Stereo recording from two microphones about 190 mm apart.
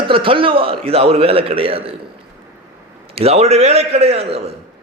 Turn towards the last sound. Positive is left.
turn(degrees=-30)  # may be behind; listen again after turning